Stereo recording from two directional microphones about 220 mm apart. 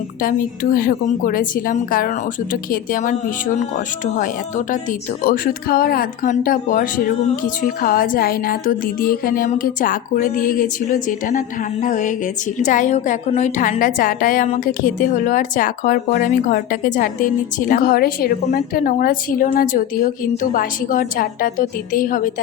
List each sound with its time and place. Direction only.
0.2 s a woman's voice: 40° left (ahead or behind)